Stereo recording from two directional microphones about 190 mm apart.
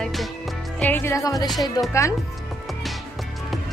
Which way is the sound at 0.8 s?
10° left (ahead or behind).